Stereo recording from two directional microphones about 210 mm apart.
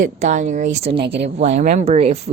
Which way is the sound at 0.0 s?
35° right (ahead or behind).